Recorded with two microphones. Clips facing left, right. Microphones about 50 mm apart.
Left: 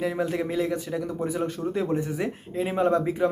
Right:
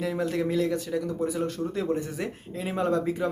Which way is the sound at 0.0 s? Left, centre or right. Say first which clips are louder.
Left 1 dB; centre.